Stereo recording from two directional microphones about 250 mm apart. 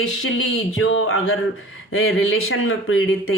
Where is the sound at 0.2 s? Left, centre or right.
Left.